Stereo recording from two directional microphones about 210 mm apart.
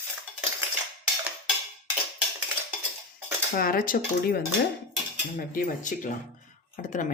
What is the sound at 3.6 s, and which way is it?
Speech, 45° left (ahead or behind).